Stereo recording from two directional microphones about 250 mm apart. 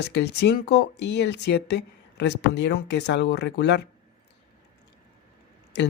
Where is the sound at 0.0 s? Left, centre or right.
Left.